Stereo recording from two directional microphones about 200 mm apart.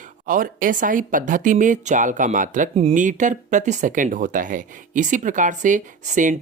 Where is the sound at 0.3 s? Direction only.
40° right (ahead or behind).